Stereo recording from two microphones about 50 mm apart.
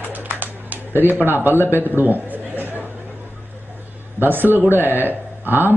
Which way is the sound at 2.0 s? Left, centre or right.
Right.